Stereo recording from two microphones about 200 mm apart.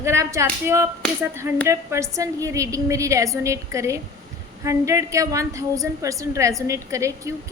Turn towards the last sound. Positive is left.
turn(degrees=-15)  # may be behind; listen again after turning